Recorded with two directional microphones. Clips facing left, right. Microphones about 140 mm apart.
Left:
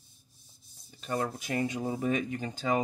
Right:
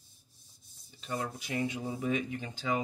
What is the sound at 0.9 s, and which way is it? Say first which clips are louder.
Speech: left 4 dB; 50° left (ahead or behind).